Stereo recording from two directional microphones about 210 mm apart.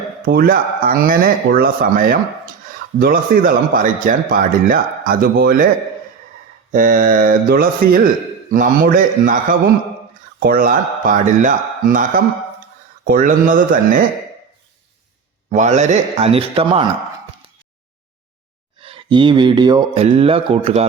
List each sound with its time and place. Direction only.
0.3 s a man's voice: 45° right (ahead or behind)
6.7 s a man's voice: 40° right (ahead or behind)
15.4 s a man's voice: 35° right (ahead or behind)
18.8 s speech: 25° right (ahead or behind)